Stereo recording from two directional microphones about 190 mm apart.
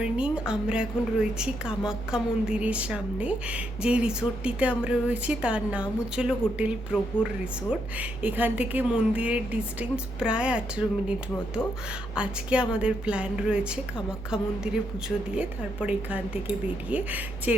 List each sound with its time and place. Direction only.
0.0 s a woman's voice: 5° right (ahead or behind)